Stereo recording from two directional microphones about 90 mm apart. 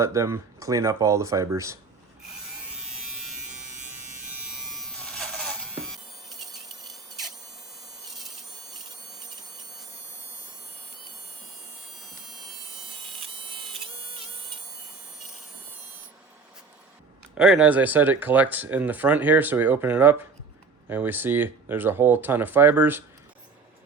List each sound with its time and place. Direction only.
0.0 s speech: 35° right (ahead or behind)
3.4 s electric shaver: 15° right (ahead or behind); by 5.5 s 5° left (ahead or behind)
5.9 s a sound: centre (ahead or behind)
17.3 s speech: 10° right (ahead or behind)